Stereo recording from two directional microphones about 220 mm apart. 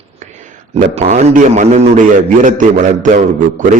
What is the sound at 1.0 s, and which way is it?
Speech, 30° right (ahead or behind).